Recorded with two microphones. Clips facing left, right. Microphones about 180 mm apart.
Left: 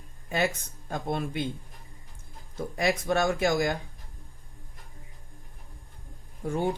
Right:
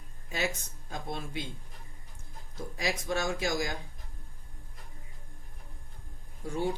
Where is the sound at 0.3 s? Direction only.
55° left (ahead or behind).